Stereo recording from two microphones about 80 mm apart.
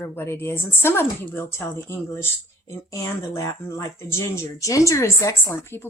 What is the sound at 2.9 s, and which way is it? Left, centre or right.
A woman's voice, left.